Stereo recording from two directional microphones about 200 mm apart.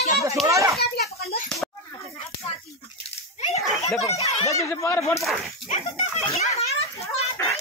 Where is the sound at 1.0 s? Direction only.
Centre (ahead or behind).